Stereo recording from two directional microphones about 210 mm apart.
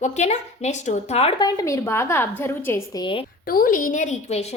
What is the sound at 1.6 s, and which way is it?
A woman's voice, 15° left (ahead or behind).